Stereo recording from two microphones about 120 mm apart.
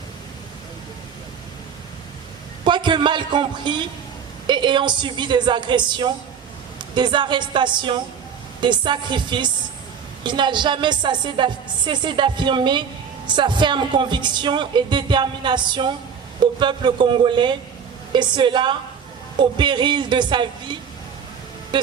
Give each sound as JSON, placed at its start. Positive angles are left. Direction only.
{"t": 2.6, "sound": "a woman's voice", "side_deg": -40}